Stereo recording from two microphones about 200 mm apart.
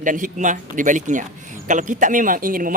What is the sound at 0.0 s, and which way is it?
Speech, 40° right (ahead or behind).